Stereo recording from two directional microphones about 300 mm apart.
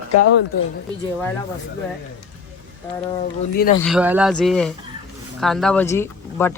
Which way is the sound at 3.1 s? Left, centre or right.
Centre.